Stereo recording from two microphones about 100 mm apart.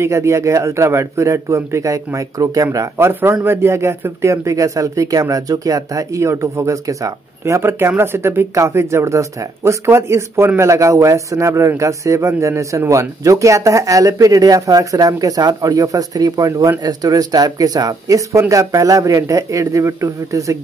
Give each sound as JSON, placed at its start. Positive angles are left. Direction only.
{"t": 0.0, "sound": "speech", "side_deg": -30}